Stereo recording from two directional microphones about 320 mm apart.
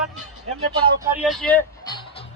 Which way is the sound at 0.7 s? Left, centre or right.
Centre.